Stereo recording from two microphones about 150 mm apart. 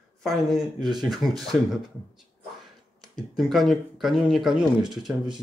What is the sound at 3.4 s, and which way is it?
Speech, centre (ahead or behind).